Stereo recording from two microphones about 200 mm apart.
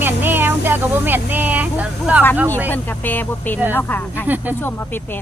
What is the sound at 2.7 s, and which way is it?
Speech, 10° left (ahead or behind).